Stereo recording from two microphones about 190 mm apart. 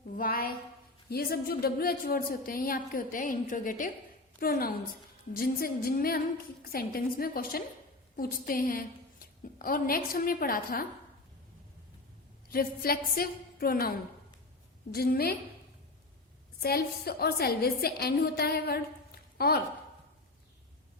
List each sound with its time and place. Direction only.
0.2 s a woman's voice: 50° left (ahead or behind)
12.5 s a woman's voice: 50° left (ahead or behind)
14.9 s a woman's voice: 55° left (ahead or behind)
16.6 s a woman's voice: 55° left (ahead or behind)